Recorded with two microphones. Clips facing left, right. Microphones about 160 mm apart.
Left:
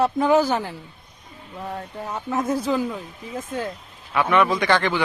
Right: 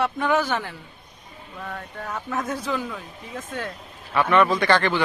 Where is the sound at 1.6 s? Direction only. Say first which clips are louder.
Left 3 dB; 20° left (ahead or behind).